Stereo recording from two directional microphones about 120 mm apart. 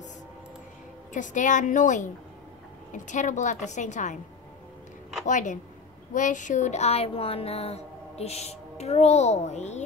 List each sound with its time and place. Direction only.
1.1 s a woman's voice: 90° left
5.2 s a woman's voice: 90° left; by 9.8 s 70° left (ahead or behind)